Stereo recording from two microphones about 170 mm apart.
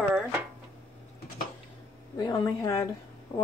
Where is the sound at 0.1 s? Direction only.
5° right (ahead or behind).